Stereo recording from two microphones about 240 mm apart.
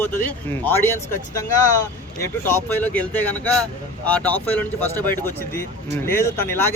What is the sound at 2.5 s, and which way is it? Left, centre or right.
Speech, centre.